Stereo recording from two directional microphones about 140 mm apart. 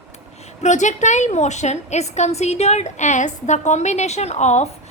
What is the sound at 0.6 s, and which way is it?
A woman's voice, 60° left (ahead or behind).